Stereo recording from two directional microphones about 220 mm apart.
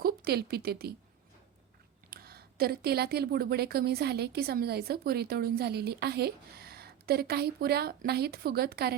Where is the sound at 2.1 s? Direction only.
45° right (ahead or behind).